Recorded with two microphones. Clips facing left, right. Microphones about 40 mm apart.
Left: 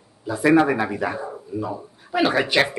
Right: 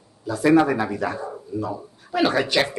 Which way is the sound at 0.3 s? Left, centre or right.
Left.